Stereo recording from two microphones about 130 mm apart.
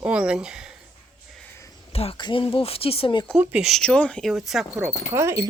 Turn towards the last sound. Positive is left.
turn(degrees=-20)  # may be behind; listen again after turning